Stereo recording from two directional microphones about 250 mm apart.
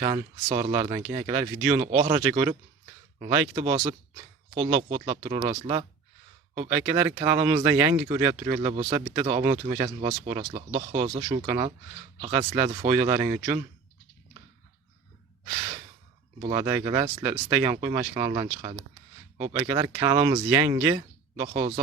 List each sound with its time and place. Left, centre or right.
0.0 s speech: centre
16.4 s speech: centre